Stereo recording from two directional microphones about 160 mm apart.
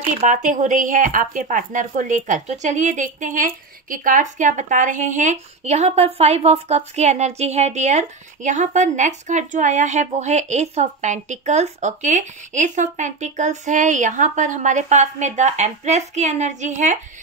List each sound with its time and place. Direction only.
0.0 s speech: 55° right (ahead or behind)